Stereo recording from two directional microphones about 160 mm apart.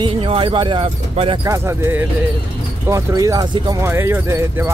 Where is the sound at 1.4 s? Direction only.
20° right (ahead or behind).